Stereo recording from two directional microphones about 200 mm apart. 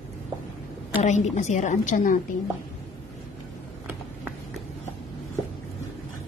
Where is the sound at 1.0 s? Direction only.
35° left (ahead or behind).